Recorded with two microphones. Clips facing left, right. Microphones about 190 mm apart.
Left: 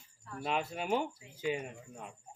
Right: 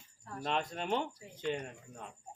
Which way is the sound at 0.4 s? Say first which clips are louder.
Left 1 dB; 5° left (ahead or behind).